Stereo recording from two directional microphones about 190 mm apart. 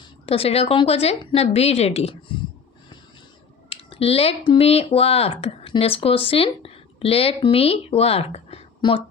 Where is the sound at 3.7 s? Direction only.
30° left (ahead or behind).